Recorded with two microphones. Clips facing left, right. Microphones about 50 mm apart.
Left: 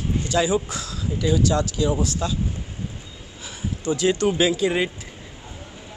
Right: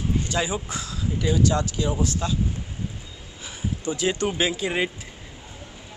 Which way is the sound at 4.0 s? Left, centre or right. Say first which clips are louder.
Left 4 dB; centre.